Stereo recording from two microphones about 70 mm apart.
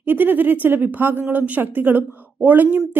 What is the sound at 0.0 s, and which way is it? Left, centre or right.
Speech, right.